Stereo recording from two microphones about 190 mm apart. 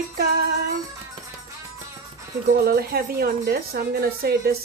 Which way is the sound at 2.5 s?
55° right (ahead or behind).